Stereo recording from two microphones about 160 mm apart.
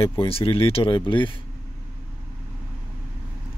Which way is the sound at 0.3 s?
35° left (ahead or behind).